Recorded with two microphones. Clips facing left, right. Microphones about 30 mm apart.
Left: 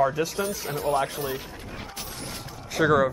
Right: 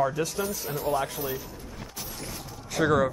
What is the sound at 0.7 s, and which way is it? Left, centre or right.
Speech, left.